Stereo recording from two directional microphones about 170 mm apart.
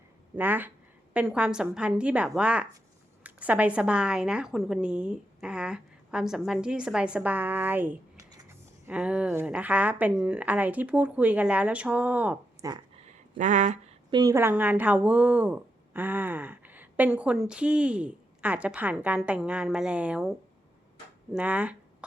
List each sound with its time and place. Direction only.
0.3 s a woman's voice: 10° right (ahead or behind)
12.6 s speech: 20° right (ahead or behind)
13.1 s a sound: 45° right (ahead or behind)
14.1 s speech: 20° right (ahead or behind); by 20.3 s 5° right (ahead or behind)
21.3 s speech: 10° right (ahead or behind)